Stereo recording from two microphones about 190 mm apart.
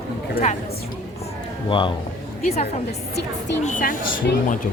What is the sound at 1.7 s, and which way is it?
A woman's voice, 25° left (ahead or behind).